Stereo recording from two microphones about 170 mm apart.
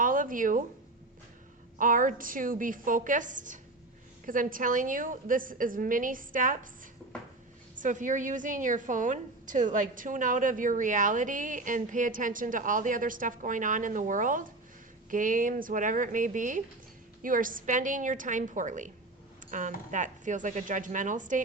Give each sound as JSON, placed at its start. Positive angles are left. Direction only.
{"t": 0.0, "sound": "a sound", "side_deg": -55}
{"t": 1.8, "sound": "a woman's voice", "side_deg": -50}
{"t": 7.8, "sound": "a woman's voice", "side_deg": -50}